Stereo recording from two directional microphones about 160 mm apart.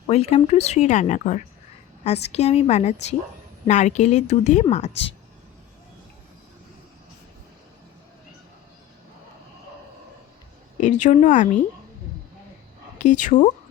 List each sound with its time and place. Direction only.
0.1 s speech: 40° left (ahead or behind)
10.8 s speech: 50° left (ahead or behind)
13.0 s speech: 50° left (ahead or behind)